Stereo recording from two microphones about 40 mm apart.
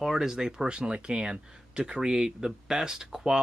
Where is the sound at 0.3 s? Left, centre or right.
Centre.